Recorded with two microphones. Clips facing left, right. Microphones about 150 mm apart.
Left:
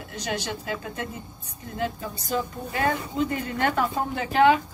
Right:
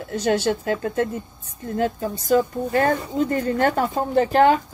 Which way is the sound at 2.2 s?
45° right (ahead or behind).